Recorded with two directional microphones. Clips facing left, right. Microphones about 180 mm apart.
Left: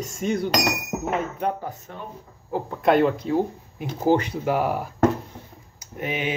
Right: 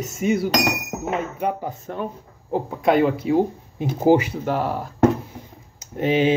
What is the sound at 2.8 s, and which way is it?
Speech, centre (ahead or behind).